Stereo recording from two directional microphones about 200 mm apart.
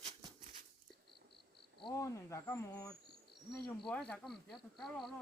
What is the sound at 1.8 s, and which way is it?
Speech, 20° left (ahead or behind).